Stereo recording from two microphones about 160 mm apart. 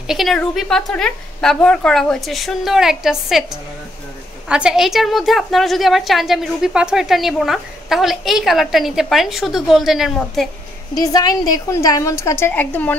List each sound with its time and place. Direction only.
0.0 s a woman's voice: centre (ahead or behind)
4.5 s a woman's voice: 5° right (ahead or behind)
11.0 s a woman's voice: 25° left (ahead or behind)